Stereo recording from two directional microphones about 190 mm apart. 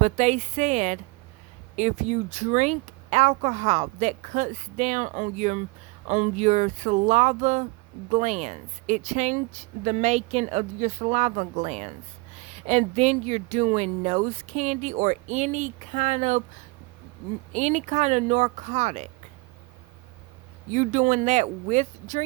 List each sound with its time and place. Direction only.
0.0 s speech: 40° right (ahead or behind)
17.5 s speech: 40° right (ahead or behind)
20.7 s speech: 40° right (ahead or behind)